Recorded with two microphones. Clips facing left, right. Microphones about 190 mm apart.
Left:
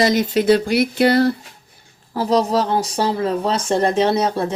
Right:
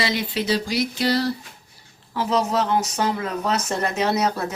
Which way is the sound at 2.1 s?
35° left (ahead or behind).